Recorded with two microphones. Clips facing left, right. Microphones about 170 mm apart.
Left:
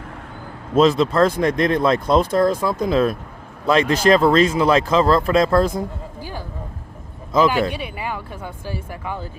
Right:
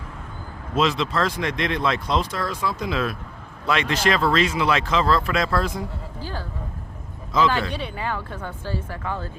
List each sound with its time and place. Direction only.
0.8 s speech: 45° left (ahead or behind)
6.1 s a sound: 15° left (ahead or behind)
7.7 s speech: 10° left (ahead or behind)